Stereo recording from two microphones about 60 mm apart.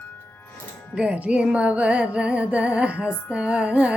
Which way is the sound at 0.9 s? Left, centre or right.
Right.